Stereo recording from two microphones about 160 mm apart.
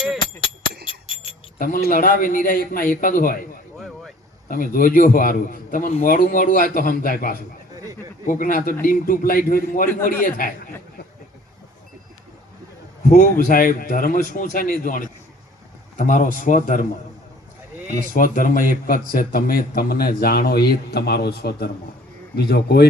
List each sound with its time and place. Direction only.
0.9 s a sound: 35° left (ahead or behind)
1.5 s a man's voice: 60° left (ahead or behind)
4.4 s a man's voice: 60° left (ahead or behind)
13.1 s a man's voice: 50° left (ahead or behind)
18.1 s a man's voice: 55° left (ahead or behind)
19.1 s a man's voice: 70° left (ahead or behind); by 22.9 s 90° left